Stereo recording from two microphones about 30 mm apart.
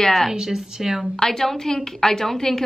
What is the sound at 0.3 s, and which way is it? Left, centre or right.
Speech, centre.